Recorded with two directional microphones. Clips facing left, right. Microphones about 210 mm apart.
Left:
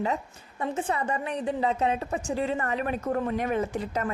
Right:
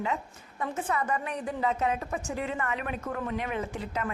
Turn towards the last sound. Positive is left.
turn(degrees=40)  # may be behind; listen again after turning